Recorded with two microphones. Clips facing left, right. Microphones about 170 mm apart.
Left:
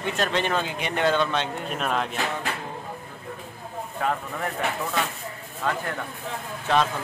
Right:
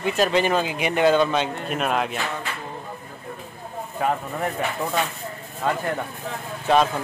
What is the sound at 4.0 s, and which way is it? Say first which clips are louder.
Speech: right 3 dB; 15° right (ahead or behind).